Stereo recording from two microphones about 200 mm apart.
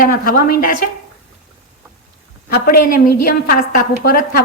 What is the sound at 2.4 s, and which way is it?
A woman's voice, 50° left (ahead or behind).